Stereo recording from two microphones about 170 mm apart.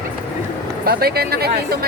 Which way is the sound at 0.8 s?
65° right (ahead or behind).